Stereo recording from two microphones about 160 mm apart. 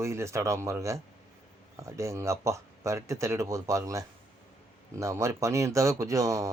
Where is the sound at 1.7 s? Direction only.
20° right (ahead or behind).